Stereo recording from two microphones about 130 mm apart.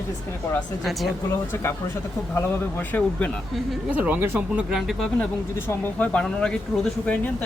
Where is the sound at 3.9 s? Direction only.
15° right (ahead or behind).